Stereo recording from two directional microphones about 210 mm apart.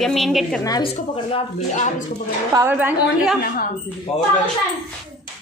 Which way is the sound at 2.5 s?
10° right (ahead or behind).